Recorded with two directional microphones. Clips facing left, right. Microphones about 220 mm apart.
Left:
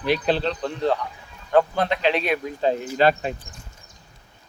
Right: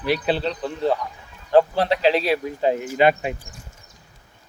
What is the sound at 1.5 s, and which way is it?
Speech, 30° right (ahead or behind).